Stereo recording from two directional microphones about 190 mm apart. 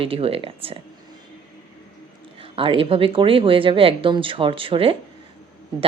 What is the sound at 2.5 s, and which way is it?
Speech, 30° right (ahead or behind).